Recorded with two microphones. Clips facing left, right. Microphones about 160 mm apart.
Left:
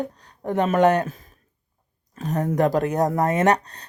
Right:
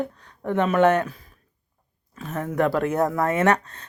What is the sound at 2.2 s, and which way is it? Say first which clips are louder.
Speech: left 2 dB; 40° left (ahead or behind).